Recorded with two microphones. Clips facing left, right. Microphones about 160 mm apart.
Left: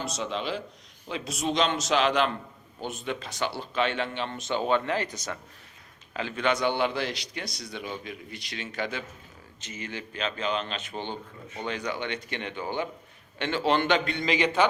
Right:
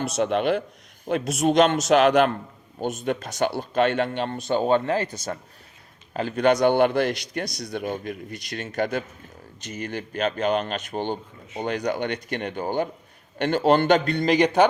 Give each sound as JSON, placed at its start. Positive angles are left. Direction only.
{"t": 0.0, "sound": "a man's voice", "side_deg": -60}
{"t": 6.1, "sound": "a man's voice", "side_deg": -45}